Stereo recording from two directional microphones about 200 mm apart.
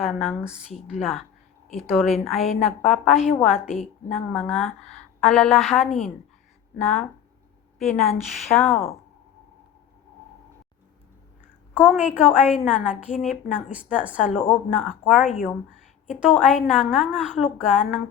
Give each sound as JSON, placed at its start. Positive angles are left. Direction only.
{"t": 0.0, "sound": "a woman's voice", "side_deg": 0}
{"t": 0.7, "sound": "a woman's voice", "side_deg": 35}
{"t": 1.7, "sound": "a woman's voice", "side_deg": 0}
{"t": 11.9, "sound": "a woman's voice", "side_deg": -5}